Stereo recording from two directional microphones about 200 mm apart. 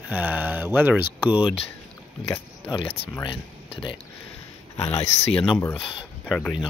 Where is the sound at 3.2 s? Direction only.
25° left (ahead or behind).